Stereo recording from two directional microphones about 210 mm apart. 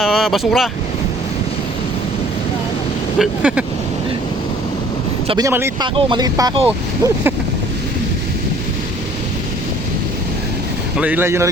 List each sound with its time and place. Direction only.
0.0 s speech: centre (ahead or behind)
3.2 s speech: 5° right (ahead or behind)
5.3 s speech: 15° right (ahead or behind)
10.9 s speech: 5° right (ahead or behind)